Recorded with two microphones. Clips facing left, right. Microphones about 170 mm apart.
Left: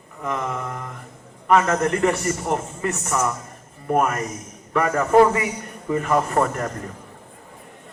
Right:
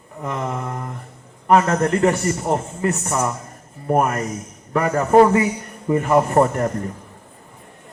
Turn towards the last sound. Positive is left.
turn(degrees=-35)  # may be behind; listen again after turning